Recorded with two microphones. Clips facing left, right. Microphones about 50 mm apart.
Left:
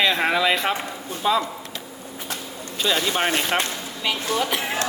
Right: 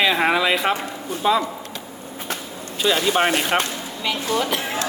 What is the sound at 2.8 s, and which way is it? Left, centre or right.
Speech, centre.